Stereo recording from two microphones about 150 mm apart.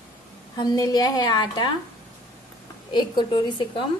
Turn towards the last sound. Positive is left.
turn(degrees=30)  # may be behind; listen again after turning